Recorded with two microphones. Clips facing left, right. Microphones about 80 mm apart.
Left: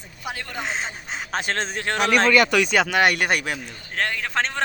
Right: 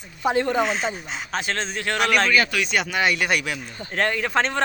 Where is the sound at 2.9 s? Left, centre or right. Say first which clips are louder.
Left 2 dB; left.